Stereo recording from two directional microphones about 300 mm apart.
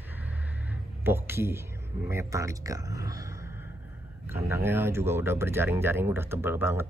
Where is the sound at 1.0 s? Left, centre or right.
Centre.